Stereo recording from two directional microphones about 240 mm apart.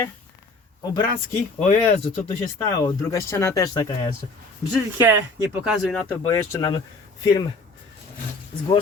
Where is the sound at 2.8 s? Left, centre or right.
Centre.